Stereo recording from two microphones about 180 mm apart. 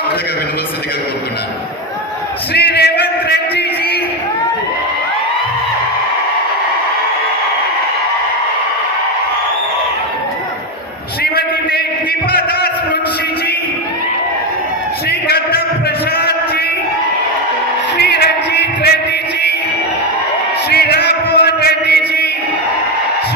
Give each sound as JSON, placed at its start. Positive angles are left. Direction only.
{"t": 2.5, "sound": "music", "side_deg": 65}
{"t": 11.2, "sound": "a sound", "side_deg": 60}
{"t": 16.1, "sound": "music", "side_deg": 60}
{"t": 17.9, "sound": "music", "side_deg": 65}
{"t": 20.7, "sound": "chant", "side_deg": 65}